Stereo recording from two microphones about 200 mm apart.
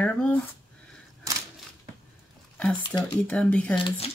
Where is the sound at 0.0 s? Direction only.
5° left (ahead or behind).